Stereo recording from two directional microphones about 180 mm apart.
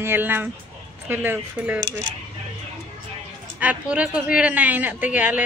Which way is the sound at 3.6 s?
5° right (ahead or behind).